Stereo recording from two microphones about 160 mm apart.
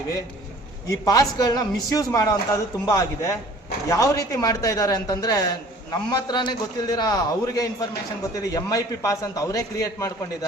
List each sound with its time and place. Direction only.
0.9 s speech: 20° left (ahead or behind)